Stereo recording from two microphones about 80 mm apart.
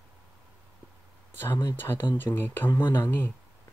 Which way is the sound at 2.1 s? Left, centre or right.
Left.